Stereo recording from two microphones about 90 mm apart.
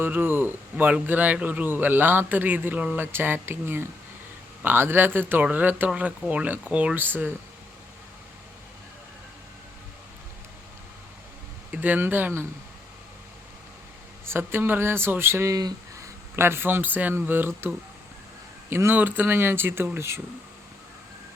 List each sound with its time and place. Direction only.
0.0 s speech: 20° right (ahead or behind)
11.7 s speech: 20° right (ahead or behind)
14.3 s speech: 25° right (ahead or behind)
15.5 s a sound: 45° right (ahead or behind)
16.3 s speech: 30° right (ahead or behind)